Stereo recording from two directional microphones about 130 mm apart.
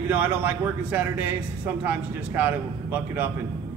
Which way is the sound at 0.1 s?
15° right (ahead or behind).